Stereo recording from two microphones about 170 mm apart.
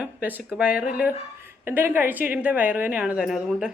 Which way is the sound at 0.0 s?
10° right (ahead or behind).